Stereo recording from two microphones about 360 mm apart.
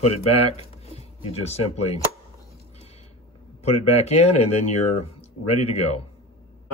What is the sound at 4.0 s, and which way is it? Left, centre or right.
Speech, centre.